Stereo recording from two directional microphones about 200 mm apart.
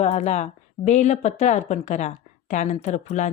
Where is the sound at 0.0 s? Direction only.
35° left (ahead or behind).